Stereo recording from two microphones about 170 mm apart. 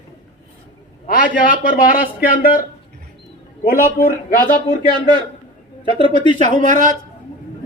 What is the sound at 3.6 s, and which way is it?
Speech, 55° left (ahead or behind).